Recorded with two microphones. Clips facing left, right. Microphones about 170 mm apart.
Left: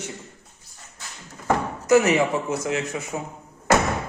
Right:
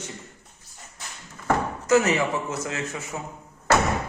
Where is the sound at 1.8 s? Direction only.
15° left (ahead or behind).